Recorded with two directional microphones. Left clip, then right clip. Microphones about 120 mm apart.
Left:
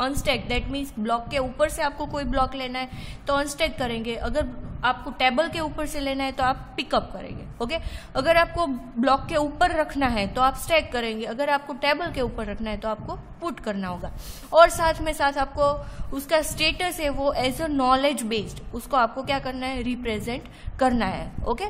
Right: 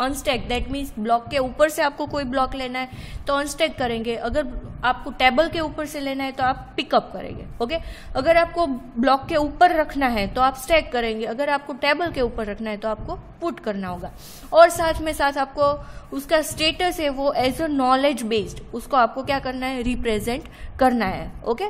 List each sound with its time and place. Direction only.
0.0 s a woman's voice: 35° right (ahead or behind)
1.4 s a woman's voice: 40° right (ahead or behind); by 6.6 s 15° right (ahead or behind)
6.8 s a woman's voice: 30° right (ahead or behind)